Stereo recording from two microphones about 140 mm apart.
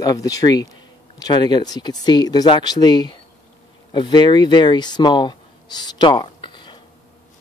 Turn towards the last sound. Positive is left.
turn(degrees=35)  # may be behind; listen again after turning